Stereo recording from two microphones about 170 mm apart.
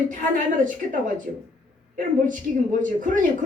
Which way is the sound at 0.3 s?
50° right (ahead or behind).